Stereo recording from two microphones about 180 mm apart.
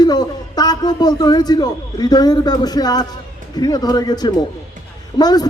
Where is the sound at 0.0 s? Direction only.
20° left (ahead or behind).